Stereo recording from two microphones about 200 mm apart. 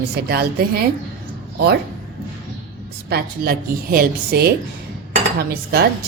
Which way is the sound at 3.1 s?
50° right (ahead or behind).